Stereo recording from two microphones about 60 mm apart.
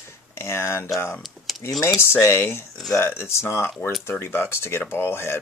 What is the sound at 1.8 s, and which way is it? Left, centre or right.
Speech, left.